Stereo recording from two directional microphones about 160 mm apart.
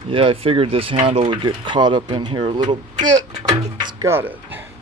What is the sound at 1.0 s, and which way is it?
Speech, 35° right (ahead or behind).